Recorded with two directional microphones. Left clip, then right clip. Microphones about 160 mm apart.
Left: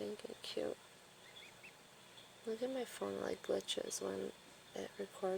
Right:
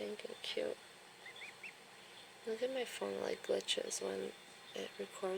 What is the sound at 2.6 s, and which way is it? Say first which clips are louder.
Speech: right 3 dB; 25° left (ahead or behind).